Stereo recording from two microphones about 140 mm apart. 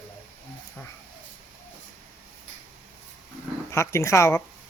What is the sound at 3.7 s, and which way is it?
Speech, 20° left (ahead or behind).